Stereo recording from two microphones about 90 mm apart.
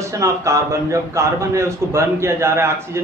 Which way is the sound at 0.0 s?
35° right (ahead or behind).